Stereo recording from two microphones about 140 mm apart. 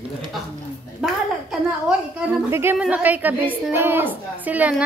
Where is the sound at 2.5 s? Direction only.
15° right (ahead or behind).